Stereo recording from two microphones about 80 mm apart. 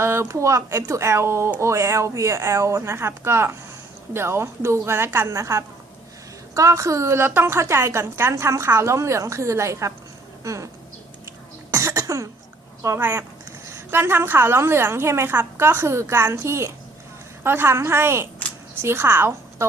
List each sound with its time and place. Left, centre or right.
0.0 s a woman's voice: right
5.3 s a woman's voice: right
11.7 s cough: right
13.0 s a woman's voice: right